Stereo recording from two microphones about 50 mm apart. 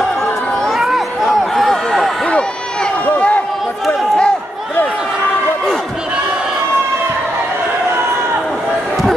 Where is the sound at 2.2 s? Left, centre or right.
Left.